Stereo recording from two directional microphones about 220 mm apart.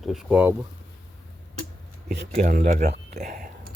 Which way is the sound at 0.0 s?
Centre (ahead or behind).